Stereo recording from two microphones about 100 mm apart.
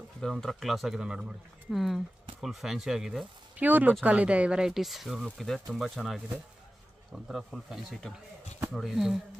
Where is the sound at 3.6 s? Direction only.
15° right (ahead or behind); by 6.2 s centre (ahead or behind).